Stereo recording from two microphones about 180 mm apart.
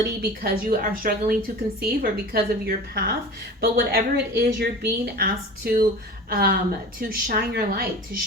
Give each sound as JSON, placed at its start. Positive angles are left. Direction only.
{"t": 0.0, "sound": "a woman's voice", "side_deg": -60}